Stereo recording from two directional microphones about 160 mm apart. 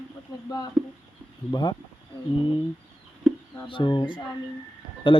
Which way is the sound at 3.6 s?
30° left (ahead or behind).